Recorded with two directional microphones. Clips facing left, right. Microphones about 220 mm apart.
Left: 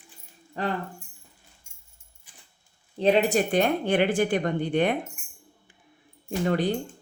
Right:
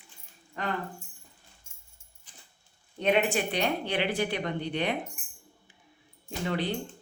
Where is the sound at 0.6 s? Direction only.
35° left (ahead or behind).